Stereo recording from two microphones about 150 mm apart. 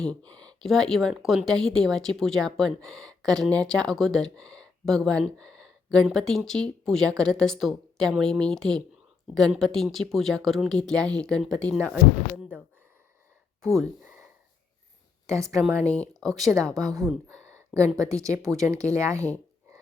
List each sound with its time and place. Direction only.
0.0 s speech: 10° left (ahead or behind)
13.6 s speech: centre (ahead or behind)
14.0 s a sound: 10° right (ahead or behind)
15.4 s speech: 20° right (ahead or behind)
15.9 s speech: 5° left (ahead or behind)
17.7 s speech: 20° right (ahead or behind)